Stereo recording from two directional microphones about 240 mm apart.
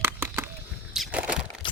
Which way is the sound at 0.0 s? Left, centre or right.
Centre.